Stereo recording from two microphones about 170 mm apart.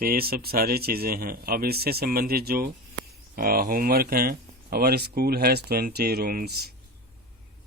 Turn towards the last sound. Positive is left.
turn(degrees=-65)  # may be behind; listen again after turning